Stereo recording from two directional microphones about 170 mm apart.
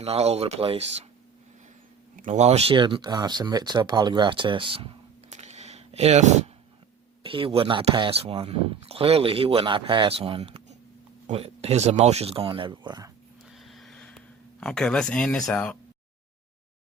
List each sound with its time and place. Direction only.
0.0 s speech: 40° right (ahead or behind)
2.1 s speech: 45° right (ahead or behind)
7.2 s speech: 30° right (ahead or behind)
13.4 s a sound: centre (ahead or behind)
14.6 s speech: 5° left (ahead or behind)